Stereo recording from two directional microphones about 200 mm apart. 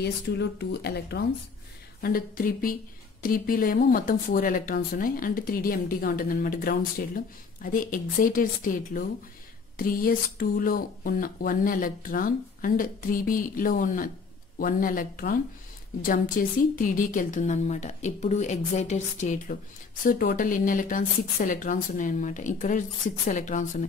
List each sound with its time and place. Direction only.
0.0 s speech: 55° left (ahead or behind); by 23.9 s 35° left (ahead or behind)